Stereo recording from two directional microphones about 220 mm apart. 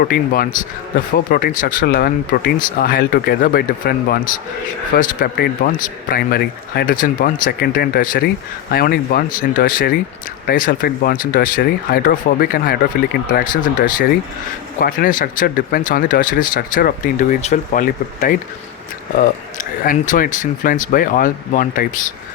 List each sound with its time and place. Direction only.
0.1 s speech: 40° left (ahead or behind)